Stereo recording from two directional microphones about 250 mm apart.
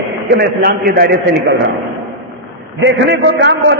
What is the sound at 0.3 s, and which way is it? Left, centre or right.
A man's voice, right.